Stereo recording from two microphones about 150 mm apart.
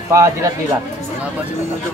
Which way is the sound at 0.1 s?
20° right (ahead or behind).